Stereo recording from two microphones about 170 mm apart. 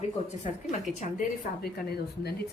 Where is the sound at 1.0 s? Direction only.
60° left (ahead or behind).